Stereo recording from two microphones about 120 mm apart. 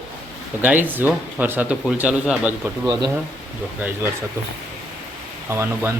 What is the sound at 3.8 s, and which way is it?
Speech, 15° right (ahead or behind).